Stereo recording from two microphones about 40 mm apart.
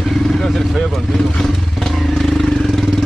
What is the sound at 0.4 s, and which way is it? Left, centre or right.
Vehicle, centre.